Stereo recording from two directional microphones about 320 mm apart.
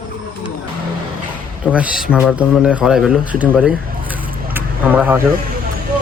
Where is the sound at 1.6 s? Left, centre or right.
Centre.